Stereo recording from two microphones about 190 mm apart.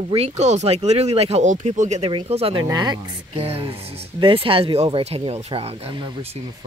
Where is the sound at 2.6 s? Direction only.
20° right (ahead or behind).